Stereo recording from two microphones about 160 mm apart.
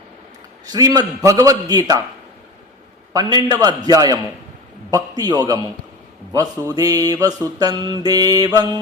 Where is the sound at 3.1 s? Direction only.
25° right (ahead or behind).